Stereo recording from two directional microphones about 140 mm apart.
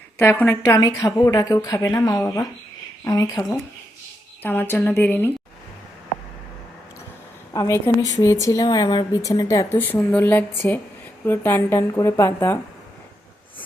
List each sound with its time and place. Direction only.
0.2 s speech: 15° left (ahead or behind)
4.4 s speech: 15° left (ahead or behind)
7.5 s speech: 25° left (ahead or behind)